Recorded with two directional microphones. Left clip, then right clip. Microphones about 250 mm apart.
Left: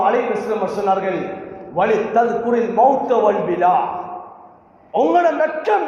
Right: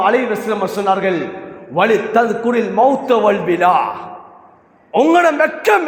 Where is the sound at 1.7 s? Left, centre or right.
Right.